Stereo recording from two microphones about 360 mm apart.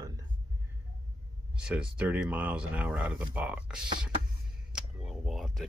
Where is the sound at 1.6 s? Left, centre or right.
Centre.